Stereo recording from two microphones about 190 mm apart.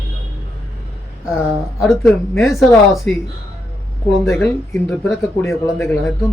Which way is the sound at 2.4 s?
Centre (ahead or behind).